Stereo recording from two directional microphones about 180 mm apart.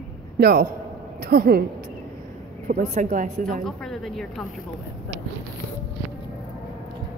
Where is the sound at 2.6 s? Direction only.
40° right (ahead or behind).